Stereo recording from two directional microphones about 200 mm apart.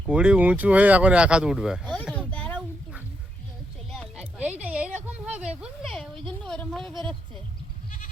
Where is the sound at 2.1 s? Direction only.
5° left (ahead or behind).